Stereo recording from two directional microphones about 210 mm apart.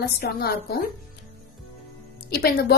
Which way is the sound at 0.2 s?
50° left (ahead or behind).